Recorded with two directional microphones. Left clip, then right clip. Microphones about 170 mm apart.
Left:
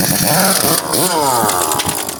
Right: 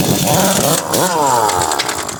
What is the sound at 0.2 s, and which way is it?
Chainsaw, 25° right (ahead or behind).